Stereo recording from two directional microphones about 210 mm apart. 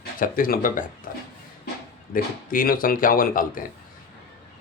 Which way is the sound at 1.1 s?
40° left (ahead or behind).